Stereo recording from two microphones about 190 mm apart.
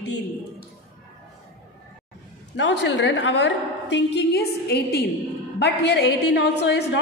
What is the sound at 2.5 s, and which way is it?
A woman's voice, 70° left (ahead or behind).